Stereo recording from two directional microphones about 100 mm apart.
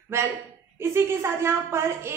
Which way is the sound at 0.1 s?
25° right (ahead or behind).